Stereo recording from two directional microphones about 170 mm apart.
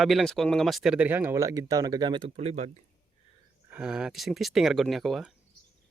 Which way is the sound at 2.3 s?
40° right (ahead or behind).